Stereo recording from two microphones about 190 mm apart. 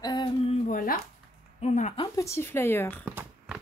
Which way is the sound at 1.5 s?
40° left (ahead or behind).